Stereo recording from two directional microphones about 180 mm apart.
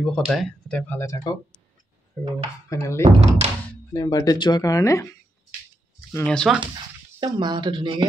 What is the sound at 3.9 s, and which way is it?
Speech, 20° left (ahead or behind).